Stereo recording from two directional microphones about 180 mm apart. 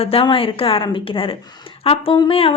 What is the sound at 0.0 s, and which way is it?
A woman's voice, 30° left (ahead or behind).